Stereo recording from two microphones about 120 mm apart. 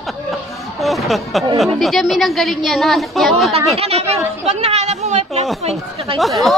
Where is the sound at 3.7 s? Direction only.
55° right (ahead or behind).